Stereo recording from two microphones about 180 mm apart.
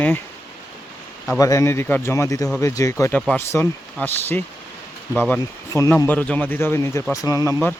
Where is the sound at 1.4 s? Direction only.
15° left (ahead or behind).